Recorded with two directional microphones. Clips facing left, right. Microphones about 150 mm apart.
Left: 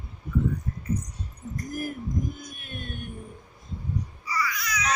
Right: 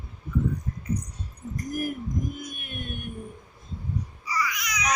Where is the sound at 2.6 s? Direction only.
15° right (ahead or behind).